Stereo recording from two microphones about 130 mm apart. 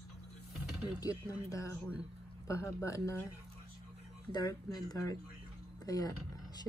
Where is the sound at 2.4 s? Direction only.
25° left (ahead or behind).